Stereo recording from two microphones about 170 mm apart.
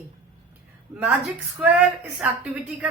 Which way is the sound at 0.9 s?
20° right (ahead or behind).